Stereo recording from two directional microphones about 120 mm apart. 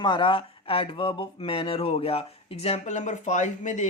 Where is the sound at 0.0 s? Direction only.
40° left (ahead or behind).